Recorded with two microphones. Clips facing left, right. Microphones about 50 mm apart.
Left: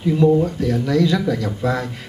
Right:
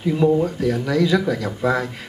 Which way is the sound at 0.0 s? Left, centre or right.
Centre.